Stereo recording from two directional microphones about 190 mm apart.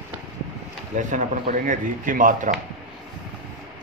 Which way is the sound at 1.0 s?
40° right (ahead or behind).